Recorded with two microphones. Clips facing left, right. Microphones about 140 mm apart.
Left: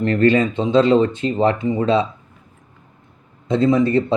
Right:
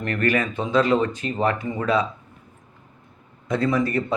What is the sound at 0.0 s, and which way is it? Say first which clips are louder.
Speech: left 7 dB; 25° left (ahead or behind).